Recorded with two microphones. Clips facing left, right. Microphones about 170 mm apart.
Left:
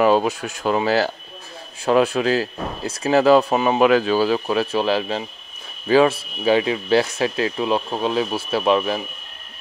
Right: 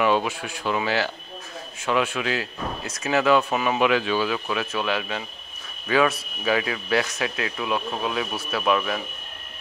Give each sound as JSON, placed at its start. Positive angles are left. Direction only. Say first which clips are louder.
{"t": 0.0, "sound": "speech", "louder": "left 5 dB", "side_deg": 40}